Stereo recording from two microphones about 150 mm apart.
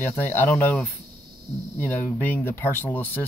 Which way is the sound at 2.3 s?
15° left (ahead or behind).